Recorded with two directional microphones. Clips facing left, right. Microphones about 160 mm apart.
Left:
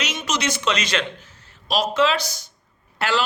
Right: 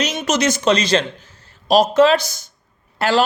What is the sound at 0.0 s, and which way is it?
Speech, 45° right (ahead or behind).